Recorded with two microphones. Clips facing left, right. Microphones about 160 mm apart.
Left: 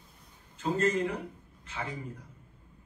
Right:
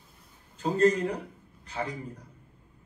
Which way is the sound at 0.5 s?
40° right (ahead or behind).